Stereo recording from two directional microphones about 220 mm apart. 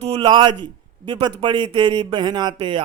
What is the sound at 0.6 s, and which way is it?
A man's voice, 20° right (ahead or behind).